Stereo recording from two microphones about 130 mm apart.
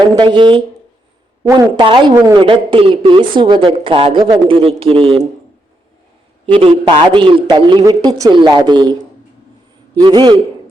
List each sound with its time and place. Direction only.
0.0 s a man's voice: 35° right (ahead or behind)
2.1 s a woman's voice: 25° right (ahead or behind)
2.4 s speech: 40° right (ahead or behind)
6.4 s a man's voice: 45° right (ahead or behind)
10.0 s a man's voice: 35° right (ahead or behind)